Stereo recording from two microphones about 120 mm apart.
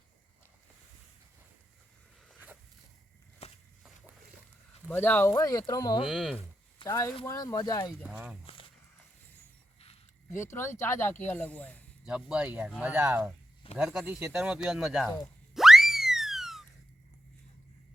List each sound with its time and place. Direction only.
2.3 s a sound: 15° right (ahead or behind)
3.4 s walk: 60° left (ahead or behind)
4.9 s speech: 15° left (ahead or behind); by 6.0 s 30° left (ahead or behind)
6.1 s speech: centre (ahead or behind)
6.8 s speech: 25° left (ahead or behind)
8.0 s speech: 5° right (ahead or behind)
10.3 s speech: 25° left (ahead or behind)
12.0 s speech: 10° right (ahead or behind)
15.5 s a sound: 5° right (ahead or behind)